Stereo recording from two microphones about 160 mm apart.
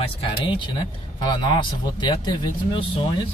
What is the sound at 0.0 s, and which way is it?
Speech, 35° left (ahead or behind).